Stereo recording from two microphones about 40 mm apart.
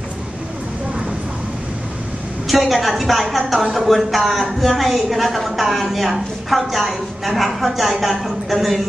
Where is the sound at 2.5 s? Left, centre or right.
Centre.